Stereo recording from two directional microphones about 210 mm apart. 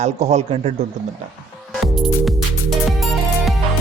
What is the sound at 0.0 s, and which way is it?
Speech, 30° right (ahead or behind).